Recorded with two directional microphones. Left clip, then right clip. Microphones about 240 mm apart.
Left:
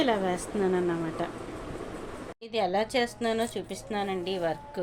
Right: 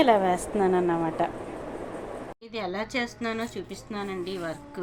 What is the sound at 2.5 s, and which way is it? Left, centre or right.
A woman's voice, left.